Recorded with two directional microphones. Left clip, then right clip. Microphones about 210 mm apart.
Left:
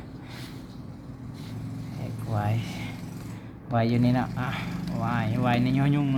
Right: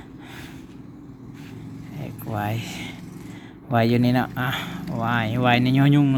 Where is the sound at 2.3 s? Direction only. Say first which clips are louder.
Right 4 dB; 25° right (ahead or behind).